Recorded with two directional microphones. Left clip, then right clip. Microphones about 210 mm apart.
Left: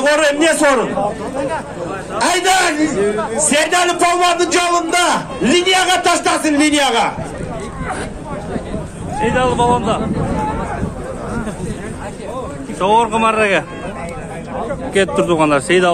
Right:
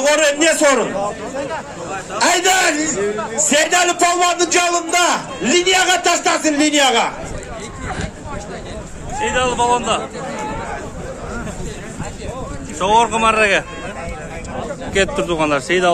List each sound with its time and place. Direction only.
0.0 s a man's voice: 25° right (ahead or behind)
2.1 s a man's voice: 10° right (ahead or behind)
3.0 s speech: 55° left (ahead or behind)
3.3 s a man's voice: centre (ahead or behind); by 7.2 s 30° left (ahead or behind)
9.2 s a man's voice: 10° right (ahead or behind)
12.7 s a man's voice: 5° right (ahead or behind)
15.0 s a man's voice: 5° left (ahead or behind)